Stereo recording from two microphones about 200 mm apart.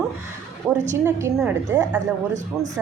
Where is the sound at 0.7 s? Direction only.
5° right (ahead or behind).